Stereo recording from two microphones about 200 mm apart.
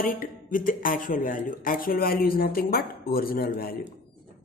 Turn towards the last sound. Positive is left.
turn(degrees=50)  # may be behind; listen again after turning